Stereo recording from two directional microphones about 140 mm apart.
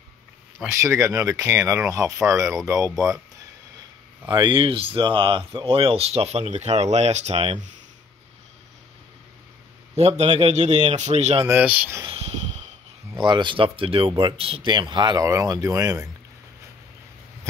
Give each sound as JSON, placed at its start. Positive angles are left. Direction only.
{"t": 0.7, "sound": "speech", "side_deg": -20}
{"t": 4.3, "sound": "speech", "side_deg": -35}
{"t": 9.9, "sound": "speech", "side_deg": -50}
{"t": 11.4, "sound": "speech", "side_deg": -10}
{"t": 12.1, "sound": "a sound", "side_deg": -50}
{"t": 13.2, "sound": "speech", "side_deg": -35}